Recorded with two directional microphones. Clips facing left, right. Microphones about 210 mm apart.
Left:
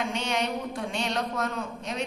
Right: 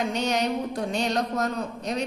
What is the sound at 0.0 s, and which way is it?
A woman's voice, 40° right (ahead or behind).